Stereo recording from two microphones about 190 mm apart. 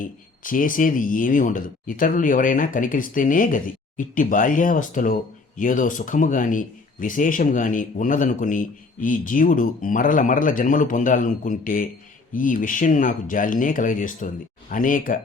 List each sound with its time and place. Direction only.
0.0 s speech: 45° left (ahead or behind)